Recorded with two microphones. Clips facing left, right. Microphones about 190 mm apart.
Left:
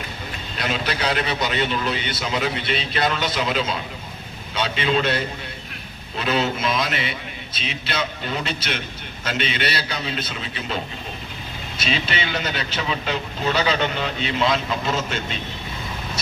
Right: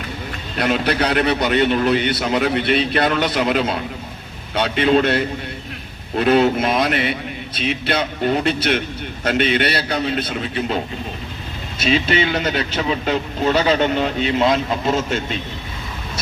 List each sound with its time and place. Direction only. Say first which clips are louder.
0.5 s a man's voice: right 7 dB; 55° right (ahead or behind)
6.1 s a man's voice: right 8 dB; 55° right (ahead or behind)
11.8 s speech: right 8 dB; 45° right (ahead or behind)